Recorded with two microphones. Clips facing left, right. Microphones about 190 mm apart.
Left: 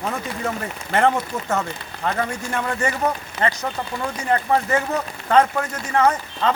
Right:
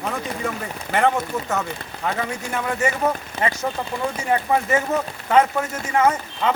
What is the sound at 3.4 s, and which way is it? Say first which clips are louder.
Speech: left 2 dB; 30° right (ahead or behind).